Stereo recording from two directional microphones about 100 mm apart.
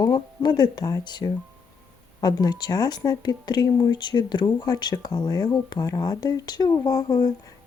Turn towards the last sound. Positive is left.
turn(degrees=40)  # may be behind; listen again after turning